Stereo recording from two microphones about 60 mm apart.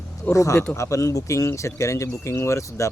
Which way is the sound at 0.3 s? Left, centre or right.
Left.